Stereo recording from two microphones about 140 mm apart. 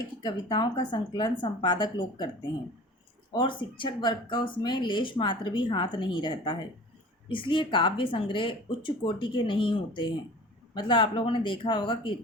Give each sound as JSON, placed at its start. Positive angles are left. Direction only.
{"t": 0.2, "sound": "speech", "side_deg": 30}
{"t": 3.3, "sound": "speech", "side_deg": 35}